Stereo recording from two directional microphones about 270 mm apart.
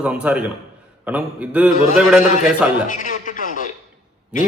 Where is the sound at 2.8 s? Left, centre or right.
Left.